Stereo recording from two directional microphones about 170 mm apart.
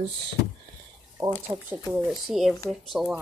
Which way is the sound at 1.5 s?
15° right (ahead or behind).